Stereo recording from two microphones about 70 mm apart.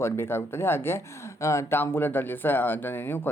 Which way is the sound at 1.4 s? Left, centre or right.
Left.